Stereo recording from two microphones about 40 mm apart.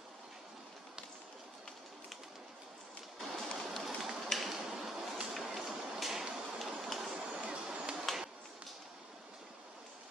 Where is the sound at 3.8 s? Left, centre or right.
Centre.